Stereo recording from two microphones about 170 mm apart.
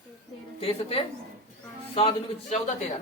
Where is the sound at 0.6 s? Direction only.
35° left (ahead or behind).